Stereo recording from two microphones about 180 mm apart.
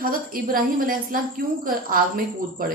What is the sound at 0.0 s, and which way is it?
Speech, 50° right (ahead or behind).